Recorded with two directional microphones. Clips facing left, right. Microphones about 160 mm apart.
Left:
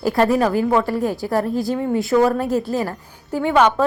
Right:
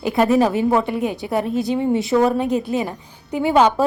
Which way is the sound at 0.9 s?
20° right (ahead or behind).